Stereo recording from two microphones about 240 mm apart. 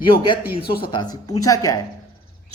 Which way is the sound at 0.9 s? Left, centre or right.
Centre.